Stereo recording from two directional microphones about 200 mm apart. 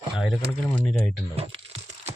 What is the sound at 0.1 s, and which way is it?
Speech, 5° right (ahead or behind).